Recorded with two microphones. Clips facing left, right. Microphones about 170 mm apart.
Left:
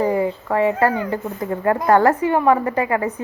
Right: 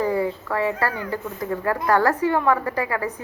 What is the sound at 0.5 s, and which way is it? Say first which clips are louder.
Speech: left 8 dB; 20° left (ahead or behind).